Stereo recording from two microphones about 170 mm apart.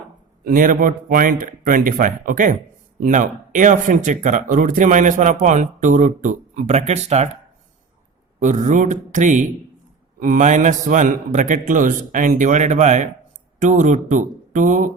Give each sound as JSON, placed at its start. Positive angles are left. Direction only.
{"t": 0.4, "sound": "speech", "side_deg": -55}
{"t": 8.4, "sound": "speech", "side_deg": -45}